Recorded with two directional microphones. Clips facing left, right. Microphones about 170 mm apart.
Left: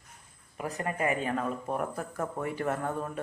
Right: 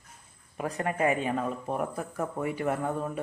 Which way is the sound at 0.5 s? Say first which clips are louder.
Right 3 dB; 25° right (ahead or behind).